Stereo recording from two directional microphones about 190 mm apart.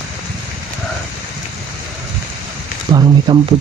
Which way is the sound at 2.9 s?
25° right (ahead or behind).